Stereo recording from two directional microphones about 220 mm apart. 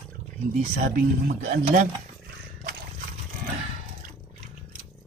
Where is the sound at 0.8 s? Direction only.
40° right (ahead or behind).